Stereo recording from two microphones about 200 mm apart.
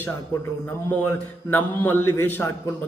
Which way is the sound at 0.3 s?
20° left (ahead or behind).